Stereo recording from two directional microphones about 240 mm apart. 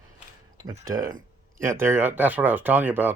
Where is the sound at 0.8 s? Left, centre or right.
Right.